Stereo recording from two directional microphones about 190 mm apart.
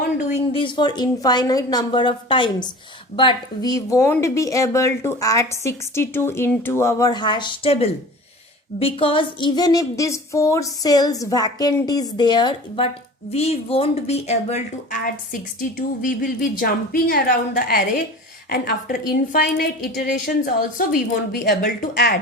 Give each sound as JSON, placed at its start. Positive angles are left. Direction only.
{"t": 0.3, "sound": "a woman's voice", "side_deg": 25}